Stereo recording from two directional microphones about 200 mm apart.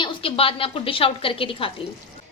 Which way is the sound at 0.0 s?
30° left (ahead or behind).